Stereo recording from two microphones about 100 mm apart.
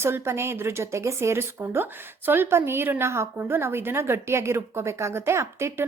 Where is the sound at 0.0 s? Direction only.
25° right (ahead or behind).